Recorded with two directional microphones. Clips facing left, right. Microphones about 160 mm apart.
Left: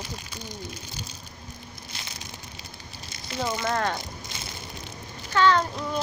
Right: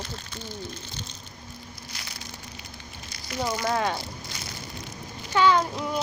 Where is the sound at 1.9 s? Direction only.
25° left (ahead or behind).